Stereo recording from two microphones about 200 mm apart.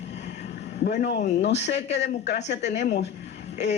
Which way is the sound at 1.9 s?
35° left (ahead or behind).